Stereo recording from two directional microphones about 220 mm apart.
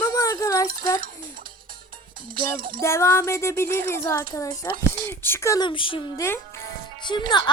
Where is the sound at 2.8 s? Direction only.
10° left (ahead or behind).